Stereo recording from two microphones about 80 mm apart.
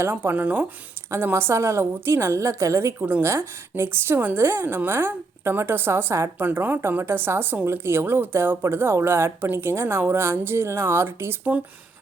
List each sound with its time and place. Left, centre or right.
0.0 s speech: right